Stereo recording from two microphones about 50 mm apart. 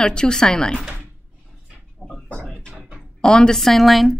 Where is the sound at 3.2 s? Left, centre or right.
Centre.